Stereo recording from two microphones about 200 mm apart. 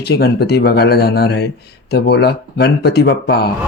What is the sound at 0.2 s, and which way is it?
Speech, 55° left (ahead or behind).